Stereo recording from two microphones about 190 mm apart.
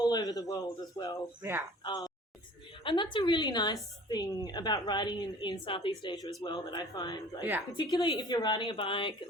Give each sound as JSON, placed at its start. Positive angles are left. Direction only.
{"t": 0.1, "sound": "a woman's voice", "side_deg": 20}
{"t": 1.4, "sound": "speech", "side_deg": -10}
{"t": 1.8, "sound": "a woman's voice", "side_deg": 20}